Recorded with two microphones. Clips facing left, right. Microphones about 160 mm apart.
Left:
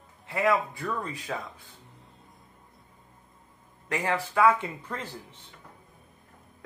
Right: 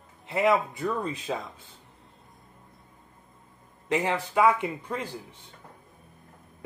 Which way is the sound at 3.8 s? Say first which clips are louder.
Right 2 dB; 20° right (ahead or behind).